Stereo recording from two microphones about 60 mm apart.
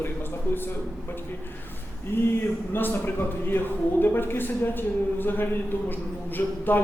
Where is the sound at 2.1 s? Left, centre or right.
Left.